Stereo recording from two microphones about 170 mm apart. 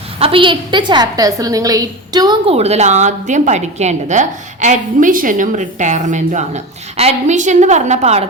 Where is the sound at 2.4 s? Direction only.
35° right (ahead or behind).